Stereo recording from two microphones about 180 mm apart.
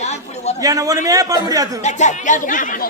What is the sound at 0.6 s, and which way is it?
A man's voice, 20° right (ahead or behind).